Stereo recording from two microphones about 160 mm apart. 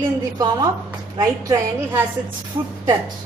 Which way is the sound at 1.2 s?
20° right (ahead or behind).